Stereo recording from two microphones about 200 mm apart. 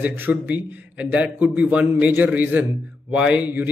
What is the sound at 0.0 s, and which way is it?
A man's voice, 10° right (ahead or behind).